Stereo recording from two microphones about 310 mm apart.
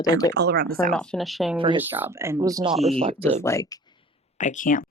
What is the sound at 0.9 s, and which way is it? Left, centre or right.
Speech, centre.